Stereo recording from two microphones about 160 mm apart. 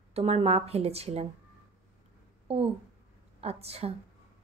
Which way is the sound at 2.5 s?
40° right (ahead or behind).